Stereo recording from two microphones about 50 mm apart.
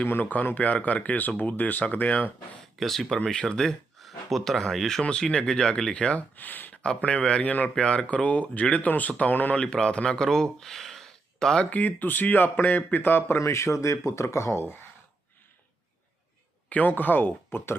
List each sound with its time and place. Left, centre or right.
0.1 s a man's voice: left
2.7 s speech: centre
3.2 s speech: centre
4.0 s a sound: centre
4.6 s speech: centre
6.3 s a man's voice: left
7.0 s a man's voice: left
9.7 s speech: centre
11.6 s a man's voice: left
13.4 s speech: left
16.6 s a man's voice: left